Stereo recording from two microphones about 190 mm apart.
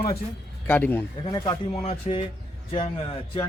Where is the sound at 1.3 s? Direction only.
20° left (ahead or behind).